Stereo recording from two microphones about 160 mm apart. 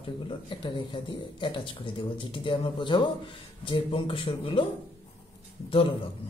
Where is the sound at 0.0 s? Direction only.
30° left (ahead or behind).